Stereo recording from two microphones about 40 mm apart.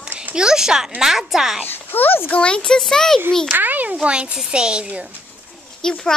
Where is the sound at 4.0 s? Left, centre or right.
Right.